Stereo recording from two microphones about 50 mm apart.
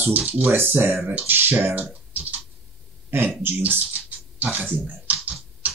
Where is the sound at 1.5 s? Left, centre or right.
Right.